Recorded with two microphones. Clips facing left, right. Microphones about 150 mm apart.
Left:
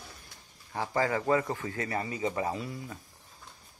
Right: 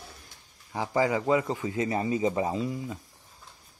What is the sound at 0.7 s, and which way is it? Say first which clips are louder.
A man's voice: right 3 dB; 15° right (ahead or behind).